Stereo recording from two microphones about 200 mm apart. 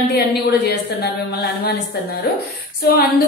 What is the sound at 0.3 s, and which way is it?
Speech, 55° left (ahead or behind).